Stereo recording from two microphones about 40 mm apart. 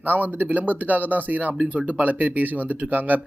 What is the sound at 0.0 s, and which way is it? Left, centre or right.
Speech, right.